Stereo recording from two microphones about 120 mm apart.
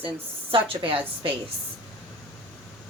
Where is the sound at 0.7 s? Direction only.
50° right (ahead or behind).